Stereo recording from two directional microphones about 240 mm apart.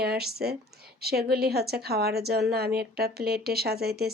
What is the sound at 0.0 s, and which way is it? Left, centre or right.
A woman's voice, right.